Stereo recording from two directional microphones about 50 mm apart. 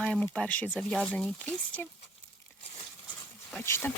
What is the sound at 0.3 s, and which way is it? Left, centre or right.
Speech, left.